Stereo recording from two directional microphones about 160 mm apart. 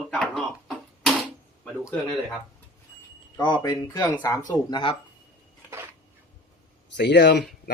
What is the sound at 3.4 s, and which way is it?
Speech, 25° left (ahead or behind).